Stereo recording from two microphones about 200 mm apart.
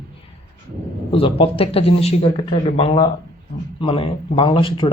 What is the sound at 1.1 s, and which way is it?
Speech, 25° left (ahead or behind).